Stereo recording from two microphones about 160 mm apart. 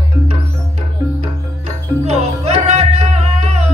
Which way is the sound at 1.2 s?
40° right (ahead or behind).